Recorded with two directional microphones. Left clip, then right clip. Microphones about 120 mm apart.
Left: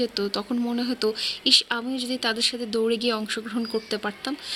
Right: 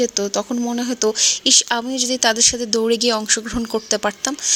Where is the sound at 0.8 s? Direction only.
45° right (ahead or behind).